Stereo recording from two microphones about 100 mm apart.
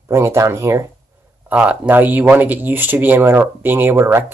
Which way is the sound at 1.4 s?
15° right (ahead or behind).